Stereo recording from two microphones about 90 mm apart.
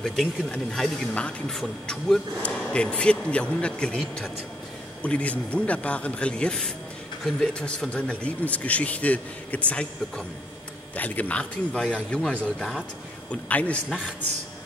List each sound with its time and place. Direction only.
0.0 s speech: 5° left (ahead or behind)
13.3 s speech: 15° left (ahead or behind)